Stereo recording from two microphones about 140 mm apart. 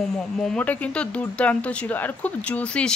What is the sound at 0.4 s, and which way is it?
Speech, 10° left (ahead or behind).